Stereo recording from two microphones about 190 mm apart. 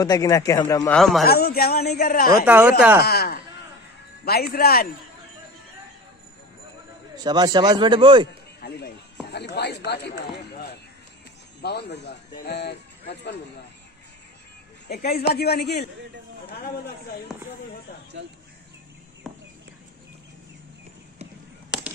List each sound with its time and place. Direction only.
0.0 s a man's voice: 20° left (ahead or behind)
0.9 s a man's voice: centre (ahead or behind)
1.2 s speech: 55° left (ahead or behind)
2.4 s speech: 10° right (ahead or behind)
3.0 s speech: 55° left (ahead or behind)
7.2 s a man's voice: 20° right (ahead or behind)
8.5 s speech: 55° left (ahead or behind)
14.9 s speech: 55° left (ahead or behind)
17.3 s a man's voice: centre (ahead or behind)
19.2 s a sound: centre (ahead or behind)
21.7 s a sound: 5° right (ahead or behind)